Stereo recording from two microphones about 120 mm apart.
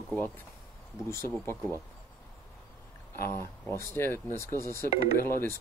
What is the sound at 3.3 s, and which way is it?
Speech, 20° left (ahead or behind).